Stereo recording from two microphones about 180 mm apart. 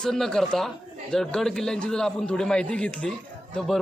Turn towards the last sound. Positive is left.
turn(degrees=0)  # may be behind; listen again after turning